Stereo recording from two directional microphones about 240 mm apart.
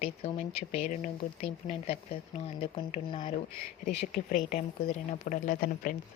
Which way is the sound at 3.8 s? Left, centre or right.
Left.